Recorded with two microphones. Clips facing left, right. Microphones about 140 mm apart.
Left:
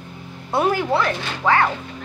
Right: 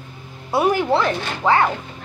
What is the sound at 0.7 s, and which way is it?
Speech, 20° right (ahead or behind).